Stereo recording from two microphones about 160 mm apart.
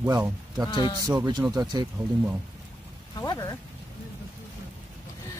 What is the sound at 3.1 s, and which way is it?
Speech, 25° left (ahead or behind).